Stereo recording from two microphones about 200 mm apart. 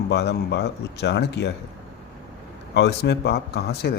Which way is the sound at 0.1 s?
55° left (ahead or behind).